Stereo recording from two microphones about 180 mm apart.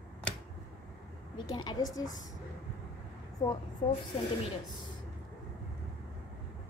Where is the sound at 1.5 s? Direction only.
20° left (ahead or behind).